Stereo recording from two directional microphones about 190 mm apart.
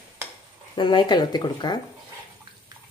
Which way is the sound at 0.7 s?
25° left (ahead or behind).